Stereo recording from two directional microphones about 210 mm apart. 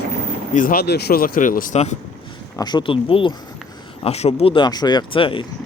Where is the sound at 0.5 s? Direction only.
40° left (ahead or behind).